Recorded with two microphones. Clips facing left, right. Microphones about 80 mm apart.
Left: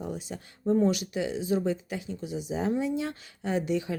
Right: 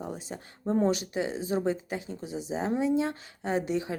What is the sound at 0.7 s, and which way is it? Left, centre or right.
Speech, right.